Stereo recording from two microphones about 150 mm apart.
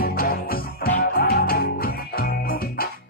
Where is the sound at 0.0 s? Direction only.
80° left.